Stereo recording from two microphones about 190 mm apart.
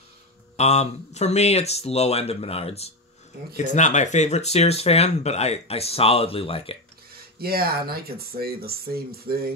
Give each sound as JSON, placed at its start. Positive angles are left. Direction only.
{"t": 0.6, "sound": "speech", "side_deg": 35}
{"t": 7.1, "sound": "speech", "side_deg": -55}